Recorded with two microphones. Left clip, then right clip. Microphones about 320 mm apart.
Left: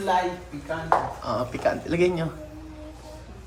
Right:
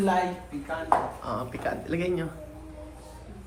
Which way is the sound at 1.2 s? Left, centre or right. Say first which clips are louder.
Left 6 dB; centre.